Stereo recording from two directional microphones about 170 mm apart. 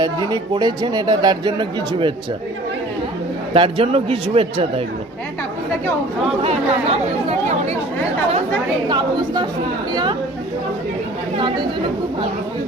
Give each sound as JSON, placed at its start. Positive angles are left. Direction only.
{"t": 0.0, "sound": "speech", "side_deg": -25}
{"t": 3.5, "sound": "speech", "side_deg": -30}
{"t": 6.4, "sound": "speech", "side_deg": -35}
{"t": 8.9, "sound": "speech", "side_deg": -25}
{"t": 11.3, "sound": "speech", "side_deg": -25}